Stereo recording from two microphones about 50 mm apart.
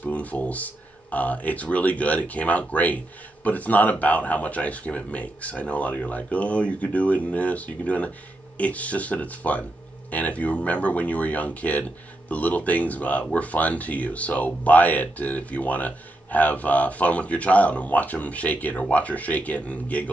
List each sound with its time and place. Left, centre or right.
0.0 s speech: left